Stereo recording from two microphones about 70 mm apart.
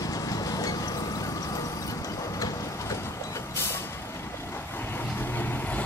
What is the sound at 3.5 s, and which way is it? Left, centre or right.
Vehicle, left.